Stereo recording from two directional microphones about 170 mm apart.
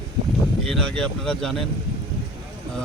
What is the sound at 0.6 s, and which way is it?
Speech, 5° left (ahead or behind).